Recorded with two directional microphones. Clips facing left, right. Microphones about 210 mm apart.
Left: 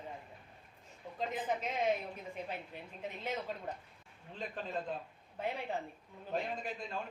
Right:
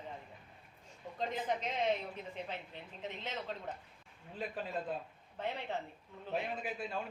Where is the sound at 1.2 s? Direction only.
5° left (ahead or behind).